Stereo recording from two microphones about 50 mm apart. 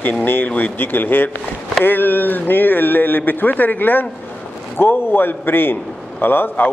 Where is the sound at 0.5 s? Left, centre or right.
Left.